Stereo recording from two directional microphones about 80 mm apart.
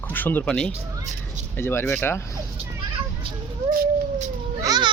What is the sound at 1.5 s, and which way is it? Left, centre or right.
Speech, left.